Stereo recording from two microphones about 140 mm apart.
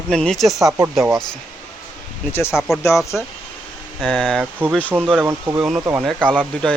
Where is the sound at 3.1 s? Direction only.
10° left (ahead or behind).